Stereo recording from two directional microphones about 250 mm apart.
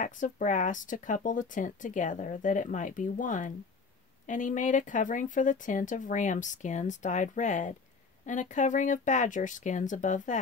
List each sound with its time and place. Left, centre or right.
0.0 s speech: left